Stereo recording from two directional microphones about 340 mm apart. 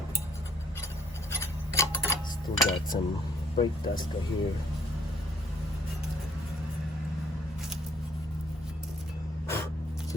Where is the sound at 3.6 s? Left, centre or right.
Centre.